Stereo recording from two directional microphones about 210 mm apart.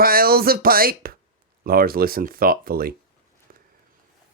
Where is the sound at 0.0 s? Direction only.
45° right (ahead or behind).